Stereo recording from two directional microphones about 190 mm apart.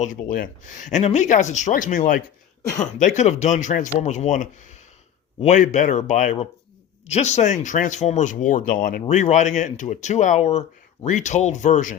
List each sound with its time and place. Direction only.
0.0 s speech: 45° left (ahead or behind)